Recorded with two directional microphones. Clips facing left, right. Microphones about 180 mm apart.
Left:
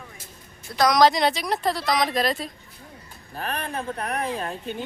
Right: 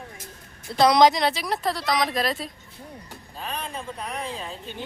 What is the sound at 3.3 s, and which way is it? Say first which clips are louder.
Speech: left 4 dB; 65° left (ahead or behind).